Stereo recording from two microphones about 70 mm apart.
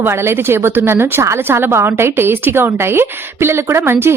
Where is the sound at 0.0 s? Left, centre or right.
Right.